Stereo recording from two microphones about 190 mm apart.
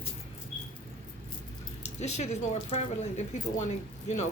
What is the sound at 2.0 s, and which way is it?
Speech, 35° left (ahead or behind).